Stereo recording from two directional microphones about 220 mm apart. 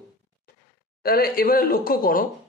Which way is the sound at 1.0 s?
45° left (ahead or behind).